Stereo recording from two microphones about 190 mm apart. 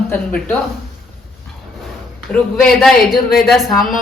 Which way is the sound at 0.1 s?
10° left (ahead or behind).